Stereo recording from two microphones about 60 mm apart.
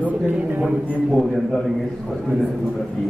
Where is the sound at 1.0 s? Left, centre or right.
Centre.